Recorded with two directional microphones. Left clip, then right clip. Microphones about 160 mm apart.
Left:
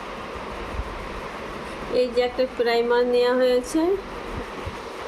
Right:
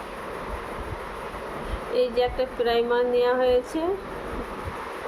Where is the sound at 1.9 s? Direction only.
55° left (ahead or behind).